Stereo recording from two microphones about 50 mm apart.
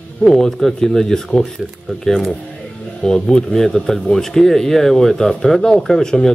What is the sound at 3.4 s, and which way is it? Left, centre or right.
Speech, centre.